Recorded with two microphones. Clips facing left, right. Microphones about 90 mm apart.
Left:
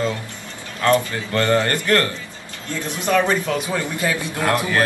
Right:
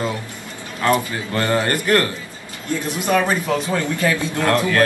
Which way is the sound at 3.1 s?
10° right (ahead or behind).